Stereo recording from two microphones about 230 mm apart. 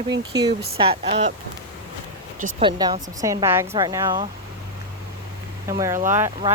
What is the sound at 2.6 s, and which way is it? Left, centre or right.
A woman's voice, centre.